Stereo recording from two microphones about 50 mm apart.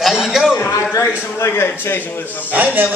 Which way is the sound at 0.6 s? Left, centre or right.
Left.